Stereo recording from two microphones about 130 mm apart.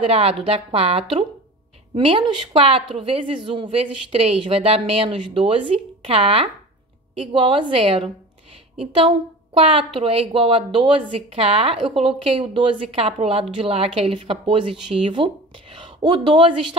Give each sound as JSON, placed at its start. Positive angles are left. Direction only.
{"t": 0.0, "sound": "a woman's voice", "side_deg": -50}